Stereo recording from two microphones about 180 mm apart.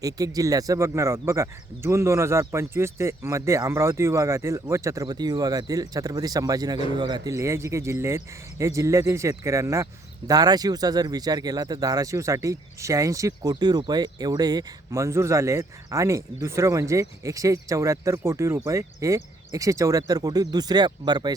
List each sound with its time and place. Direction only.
0.0 s speech: 20° right (ahead or behind)